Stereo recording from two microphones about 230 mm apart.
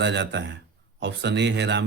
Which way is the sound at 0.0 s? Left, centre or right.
Right.